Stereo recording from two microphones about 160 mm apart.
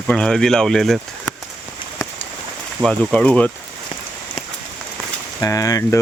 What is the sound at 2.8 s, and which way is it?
Speech, 5° left (ahead or behind).